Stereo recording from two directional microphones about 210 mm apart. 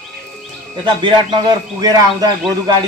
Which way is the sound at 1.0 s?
20° right (ahead or behind).